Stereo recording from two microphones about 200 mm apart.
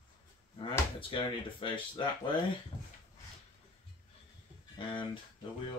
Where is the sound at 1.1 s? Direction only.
25° left (ahead or behind).